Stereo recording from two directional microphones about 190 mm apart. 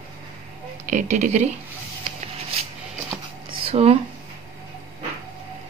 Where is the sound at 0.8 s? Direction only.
40° right (ahead or behind).